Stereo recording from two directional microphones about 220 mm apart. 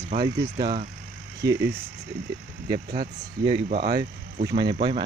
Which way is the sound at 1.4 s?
10° right (ahead or behind).